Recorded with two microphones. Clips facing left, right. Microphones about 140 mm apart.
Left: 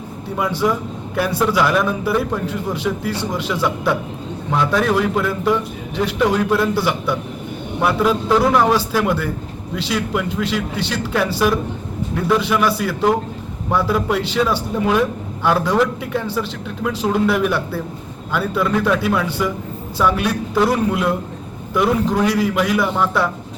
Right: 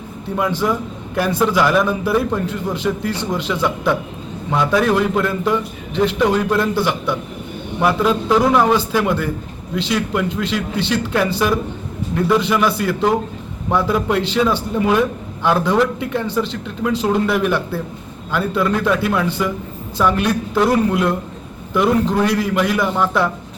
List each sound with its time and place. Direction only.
0.3 s a man's voice: 5° left (ahead or behind)